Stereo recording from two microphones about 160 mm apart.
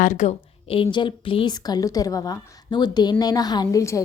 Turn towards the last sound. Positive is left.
turn(degrees=20)  # may be behind; listen again after turning